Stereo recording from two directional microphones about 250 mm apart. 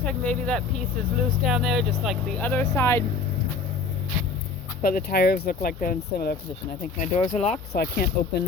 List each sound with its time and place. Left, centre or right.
0.0 s speech: centre
4.8 s speech: left
7.7 s speech: left